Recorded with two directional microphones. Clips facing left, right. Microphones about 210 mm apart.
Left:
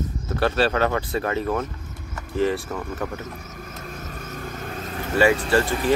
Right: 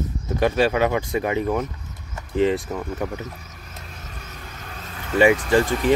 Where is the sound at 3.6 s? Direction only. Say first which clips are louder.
Left 6 dB; 45° left (ahead or behind).